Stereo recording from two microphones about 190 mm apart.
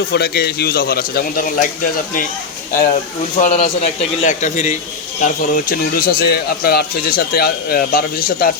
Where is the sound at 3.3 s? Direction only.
30° left (ahead or behind).